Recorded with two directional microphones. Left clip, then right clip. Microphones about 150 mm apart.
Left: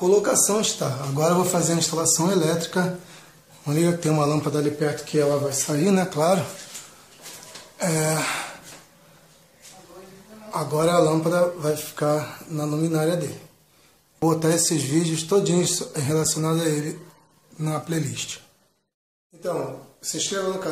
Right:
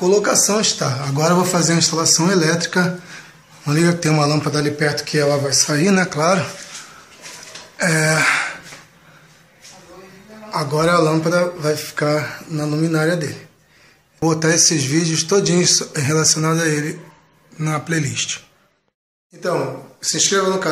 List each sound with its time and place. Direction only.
0.0 s a man's voice: 10° left (ahead or behind)
7.7 s speech: 5° left (ahead or behind)
10.5 s speech: 5° left (ahead or behind)
14.2 s a man's voice: 15° left (ahead or behind)
20.0 s speech: 5° left (ahead or behind)